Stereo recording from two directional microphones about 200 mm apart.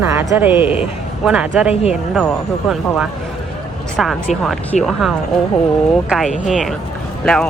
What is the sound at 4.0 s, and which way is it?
Speech, centre (ahead or behind).